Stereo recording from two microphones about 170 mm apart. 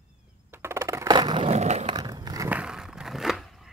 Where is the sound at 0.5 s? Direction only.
15° right (ahead or behind).